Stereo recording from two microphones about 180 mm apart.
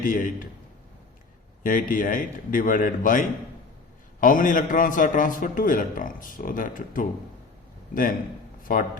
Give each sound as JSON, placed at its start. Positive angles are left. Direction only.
{"t": 0.0, "sound": "a man's voice", "side_deg": 50}
{"t": 1.6, "sound": "a man's voice", "side_deg": 50}
{"t": 8.7, "sound": "a man's voice", "side_deg": 50}